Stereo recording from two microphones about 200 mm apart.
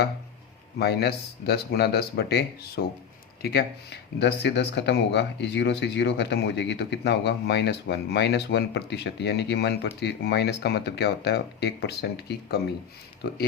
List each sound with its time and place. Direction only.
0.8 s speech: 55° left (ahead or behind)